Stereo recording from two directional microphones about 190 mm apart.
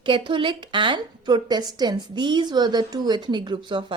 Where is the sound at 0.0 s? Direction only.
25° right (ahead or behind).